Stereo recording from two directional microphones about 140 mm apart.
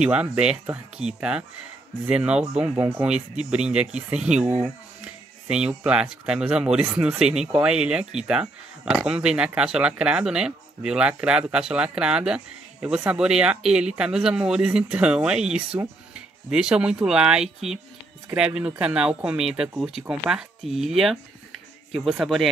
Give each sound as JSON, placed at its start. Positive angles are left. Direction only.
{"t": 0.0, "sound": "speech", "side_deg": -10}
{"t": 3.1, "sound": "speech", "side_deg": -5}